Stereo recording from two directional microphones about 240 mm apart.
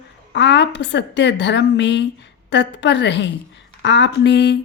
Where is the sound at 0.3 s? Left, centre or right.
Left.